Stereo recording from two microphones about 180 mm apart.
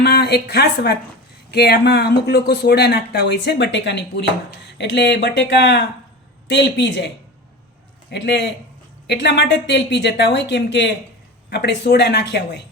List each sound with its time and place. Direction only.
0.0 s speech: 65° left (ahead or behind); by 7.1 s 80° left
8.1 s speech: 75° left (ahead or behind)